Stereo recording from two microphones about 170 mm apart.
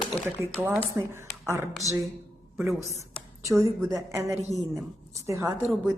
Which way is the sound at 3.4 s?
20° right (ahead or behind).